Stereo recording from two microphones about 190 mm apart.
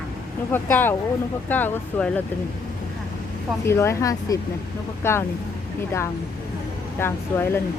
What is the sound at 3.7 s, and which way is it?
Speech, 15° left (ahead or behind).